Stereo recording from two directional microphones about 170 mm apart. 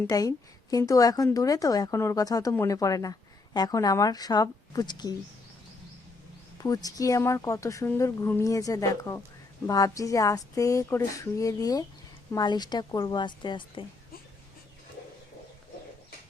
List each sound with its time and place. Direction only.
0.1 s a woman's voice: 20° left (ahead or behind)
6.6 s a woman's voice: 20° left (ahead or behind)